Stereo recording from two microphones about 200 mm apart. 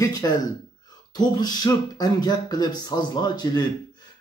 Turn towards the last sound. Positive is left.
turn(degrees=20)  # may be behind; listen again after turning